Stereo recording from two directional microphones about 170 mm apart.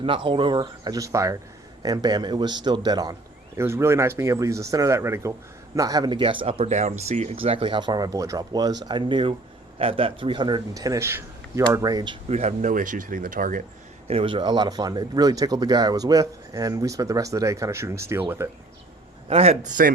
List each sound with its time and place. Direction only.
0.0 s speech: 30° right (ahead or behind)
12.3 s speech: 40° right (ahead or behind)
14.1 s speech: 30° right (ahead or behind); by 18.4 s 15° right (ahead or behind)
19.3 s a man's voice: 35° right (ahead or behind)